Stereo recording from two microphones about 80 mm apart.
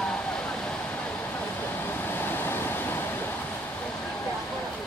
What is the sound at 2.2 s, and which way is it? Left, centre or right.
Waves, left.